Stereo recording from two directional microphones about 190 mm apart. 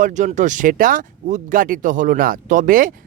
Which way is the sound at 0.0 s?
40° right (ahead or behind).